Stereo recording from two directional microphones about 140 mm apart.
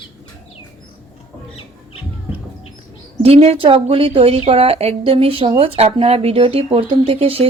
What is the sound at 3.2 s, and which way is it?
Speech, 45° right (ahead or behind).